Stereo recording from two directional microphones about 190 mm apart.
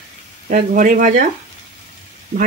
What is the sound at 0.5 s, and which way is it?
Speech, 45° right (ahead or behind).